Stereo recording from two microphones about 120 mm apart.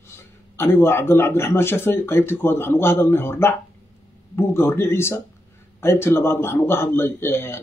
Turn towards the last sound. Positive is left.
turn(degrees=20)  # may be behind; listen again after turning